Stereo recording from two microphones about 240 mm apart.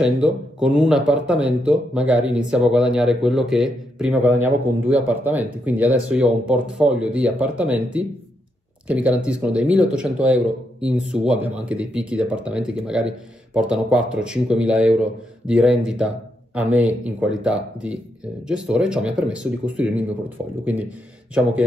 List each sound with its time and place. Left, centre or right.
0.0 s speech: centre